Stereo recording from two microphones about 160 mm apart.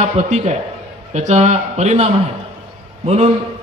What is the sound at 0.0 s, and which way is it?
A man's voice, 45° right (ahead or behind).